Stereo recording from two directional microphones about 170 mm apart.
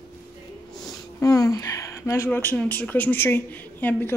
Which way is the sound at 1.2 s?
20° left (ahead or behind).